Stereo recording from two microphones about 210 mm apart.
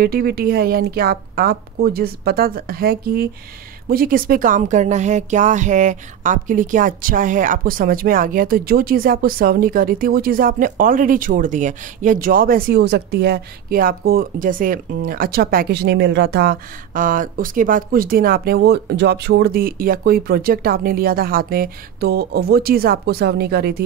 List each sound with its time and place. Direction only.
0.0 s speech: 45° right (ahead or behind)